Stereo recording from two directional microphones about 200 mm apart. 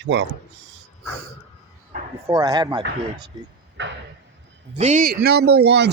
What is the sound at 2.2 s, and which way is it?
Speech, 20° right (ahead or behind).